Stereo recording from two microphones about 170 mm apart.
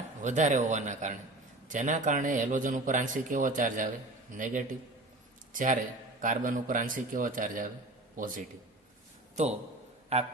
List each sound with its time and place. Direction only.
0.2 s speech: 45° right (ahead or behind)
6.2 s a man's voice: 55° right (ahead or behind)
9.3 s a man's voice: 40° right (ahead or behind)